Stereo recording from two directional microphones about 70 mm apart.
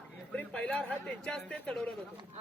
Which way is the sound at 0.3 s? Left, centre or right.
Centre.